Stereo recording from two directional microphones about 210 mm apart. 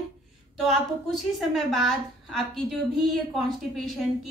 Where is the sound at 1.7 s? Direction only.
Centre (ahead or behind).